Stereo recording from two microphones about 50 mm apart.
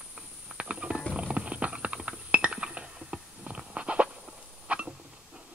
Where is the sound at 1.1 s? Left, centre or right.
Right.